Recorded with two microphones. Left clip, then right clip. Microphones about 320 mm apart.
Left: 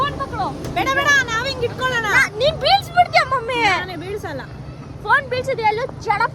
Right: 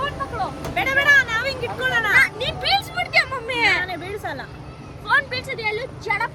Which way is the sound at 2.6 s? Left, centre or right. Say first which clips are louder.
Left 6 dB; centre.